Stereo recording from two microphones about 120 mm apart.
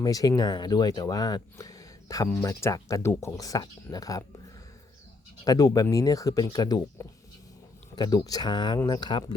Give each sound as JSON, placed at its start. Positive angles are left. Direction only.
{"t": 0.0, "sound": "speech", "side_deg": 30}
{"t": 5.5, "sound": "speech", "side_deg": 30}